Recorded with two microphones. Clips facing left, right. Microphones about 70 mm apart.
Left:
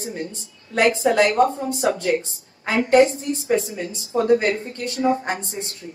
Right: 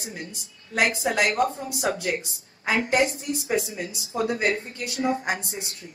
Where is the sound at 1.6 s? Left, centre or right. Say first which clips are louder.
Left 6 dB; left.